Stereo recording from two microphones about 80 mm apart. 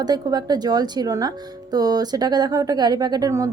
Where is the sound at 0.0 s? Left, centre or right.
Right.